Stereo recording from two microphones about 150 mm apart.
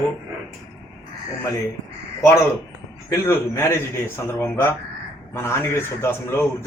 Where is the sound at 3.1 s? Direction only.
20° left (ahead or behind).